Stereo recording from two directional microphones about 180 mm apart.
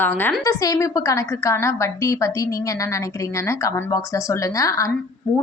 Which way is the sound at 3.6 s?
20° left (ahead or behind).